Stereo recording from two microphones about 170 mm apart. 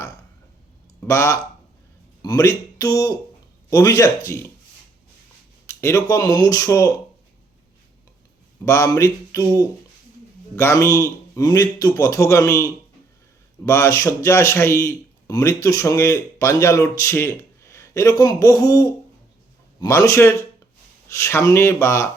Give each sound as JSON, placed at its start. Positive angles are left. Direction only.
{"t": 1.0, "sound": "a man's voice", "side_deg": 15}
{"t": 5.6, "sound": "a man's voice", "side_deg": 15}
{"t": 8.6, "sound": "a man's voice", "side_deg": 15}